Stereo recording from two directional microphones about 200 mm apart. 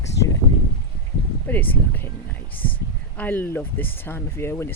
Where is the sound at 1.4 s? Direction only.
10° left (ahead or behind).